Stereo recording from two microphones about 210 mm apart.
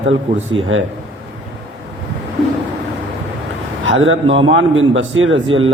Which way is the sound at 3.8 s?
65° right (ahead or behind).